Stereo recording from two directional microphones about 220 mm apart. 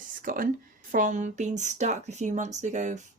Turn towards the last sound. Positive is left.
turn(degrees=-35)  # may be behind; listen again after turning